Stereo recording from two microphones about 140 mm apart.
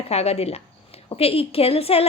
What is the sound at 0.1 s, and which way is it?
A woman's voice, 45° left (ahead or behind).